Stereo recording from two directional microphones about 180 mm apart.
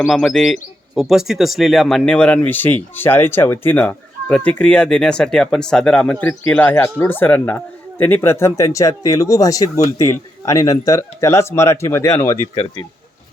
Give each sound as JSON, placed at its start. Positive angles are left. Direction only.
{"t": 0.1, "sound": "speech", "side_deg": 0}